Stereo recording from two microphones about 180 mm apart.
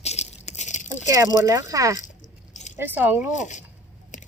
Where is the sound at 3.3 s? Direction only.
40° left (ahead or behind).